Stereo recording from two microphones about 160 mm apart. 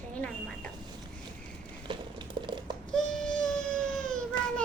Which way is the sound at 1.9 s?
30° right (ahead or behind).